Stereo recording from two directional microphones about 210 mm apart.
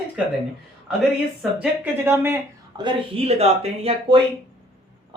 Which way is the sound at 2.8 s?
30° right (ahead or behind).